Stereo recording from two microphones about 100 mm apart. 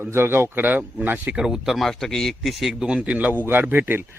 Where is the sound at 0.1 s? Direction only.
25° right (ahead or behind).